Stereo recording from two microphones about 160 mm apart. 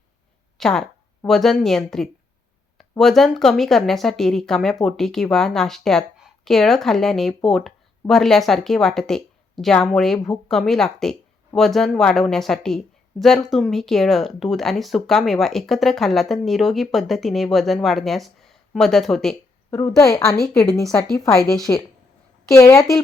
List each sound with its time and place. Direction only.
0.6 s speech: 5° left (ahead or behind)
20.0 s a woman's voice: 20° left (ahead or behind)